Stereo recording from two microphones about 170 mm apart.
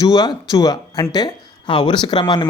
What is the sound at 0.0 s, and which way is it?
Speech, 20° left (ahead or behind).